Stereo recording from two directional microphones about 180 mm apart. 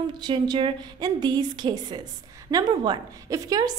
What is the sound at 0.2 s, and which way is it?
A woman's voice, 25° right (ahead or behind).